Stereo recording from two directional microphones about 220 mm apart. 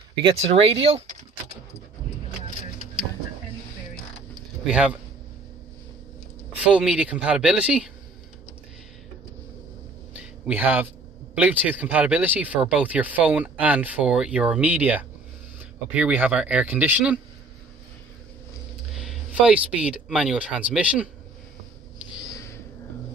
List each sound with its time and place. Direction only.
0.2 s speech: 25° right (ahead or behind)
4.6 s speech: 5° right (ahead or behind)
6.5 s speech: 5° right (ahead or behind)
10.4 s speech: 5° right (ahead or behind)
18.9 s speech: 5° right (ahead or behind)
22.1 s a sound: 5° right (ahead or behind)